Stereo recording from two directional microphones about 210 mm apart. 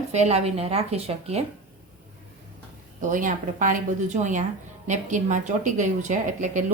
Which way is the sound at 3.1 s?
40° right (ahead or behind).